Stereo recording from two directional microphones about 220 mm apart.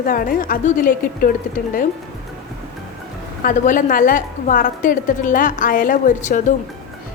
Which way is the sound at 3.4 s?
35° left (ahead or behind).